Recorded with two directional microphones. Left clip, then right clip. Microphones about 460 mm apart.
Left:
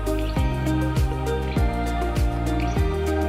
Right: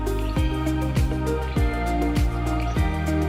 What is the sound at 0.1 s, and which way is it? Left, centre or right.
Music, centre.